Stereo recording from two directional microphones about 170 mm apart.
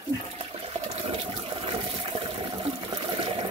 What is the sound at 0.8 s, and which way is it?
Water, 35° right (ahead or behind).